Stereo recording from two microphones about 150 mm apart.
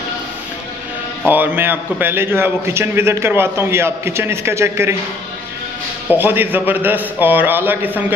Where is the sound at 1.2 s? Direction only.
10° right (ahead or behind).